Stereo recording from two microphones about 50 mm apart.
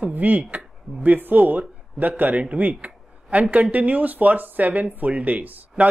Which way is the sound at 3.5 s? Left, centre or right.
Right.